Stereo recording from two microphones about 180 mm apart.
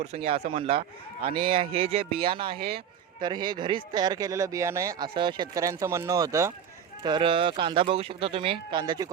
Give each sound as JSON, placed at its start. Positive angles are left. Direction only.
{"t": 0.0, "sound": "speech", "side_deg": -35}